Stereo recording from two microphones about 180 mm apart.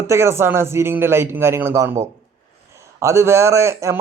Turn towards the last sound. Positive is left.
turn(degrees=-15)  # may be behind; listen again after turning